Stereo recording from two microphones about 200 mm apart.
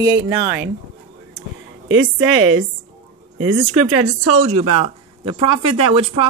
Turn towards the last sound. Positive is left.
turn(degrees=-25)  # may be behind; listen again after turning